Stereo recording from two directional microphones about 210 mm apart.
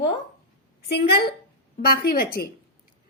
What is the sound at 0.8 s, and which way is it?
A woman's voice, 50° left (ahead or behind).